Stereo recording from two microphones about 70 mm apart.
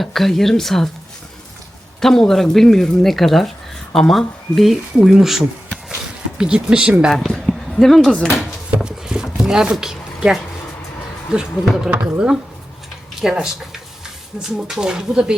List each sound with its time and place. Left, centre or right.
0.0 s speech: centre
2.0 s speech: centre
7.1 s speech: centre
8.4 s a sound: centre
11.6 s speech: centre
11.9 s speech: right